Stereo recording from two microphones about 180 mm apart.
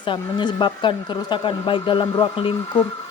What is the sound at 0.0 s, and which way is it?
A man's voice, 25° left (ahead or behind).